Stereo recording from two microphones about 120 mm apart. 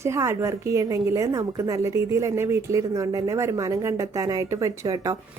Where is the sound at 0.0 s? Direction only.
25° right (ahead or behind).